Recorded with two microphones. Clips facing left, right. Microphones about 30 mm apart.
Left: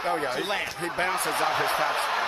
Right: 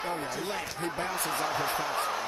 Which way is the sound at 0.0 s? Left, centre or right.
Left.